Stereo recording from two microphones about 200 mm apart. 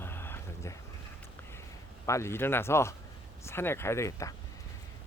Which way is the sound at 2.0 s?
15° left (ahead or behind).